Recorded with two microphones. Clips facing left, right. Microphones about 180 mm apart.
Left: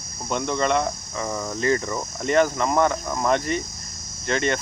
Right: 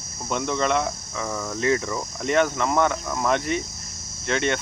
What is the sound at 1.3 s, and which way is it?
Speech, 10° left (ahead or behind).